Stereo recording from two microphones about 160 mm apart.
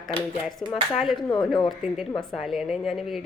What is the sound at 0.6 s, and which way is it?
Speech, 35° left (ahead or behind).